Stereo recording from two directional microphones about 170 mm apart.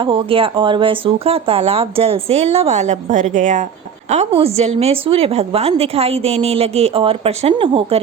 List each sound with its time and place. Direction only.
0.0 s a woman's voice: 30° right (ahead or behind); by 3.7 s 45° right (ahead or behind)
4.1 s a woman's voice: 35° right (ahead or behind)